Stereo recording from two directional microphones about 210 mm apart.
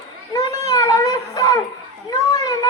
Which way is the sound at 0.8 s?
15° left (ahead or behind).